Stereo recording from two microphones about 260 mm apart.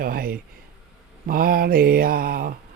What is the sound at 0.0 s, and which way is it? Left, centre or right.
Speech, right.